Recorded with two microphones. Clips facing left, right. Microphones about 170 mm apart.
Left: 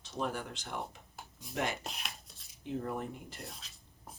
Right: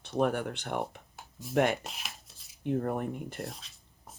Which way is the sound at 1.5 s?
60° right (ahead or behind).